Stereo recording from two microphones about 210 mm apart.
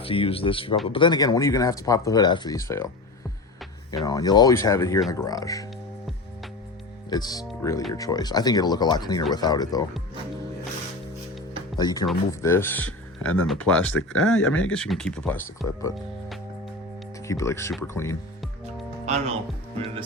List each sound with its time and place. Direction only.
0.0 s speech: 25° left (ahead or behind)
3.9 s speech: 20° left (ahead or behind)
7.1 s speech: 15° left (ahead or behind)
11.8 s speech: 20° left (ahead or behind); by 15.8 s centre (ahead or behind)
17.2 s speech: 15° left (ahead or behind)
19.0 s speech: 30° right (ahead or behind)